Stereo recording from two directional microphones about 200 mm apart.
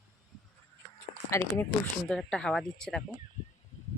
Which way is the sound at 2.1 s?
5° left (ahead or behind).